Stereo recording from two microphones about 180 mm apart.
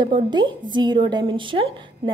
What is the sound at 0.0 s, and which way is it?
A woman's voice, 25° right (ahead or behind).